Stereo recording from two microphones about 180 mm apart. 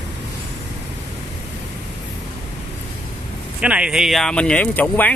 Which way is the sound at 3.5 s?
5° right (ahead or behind).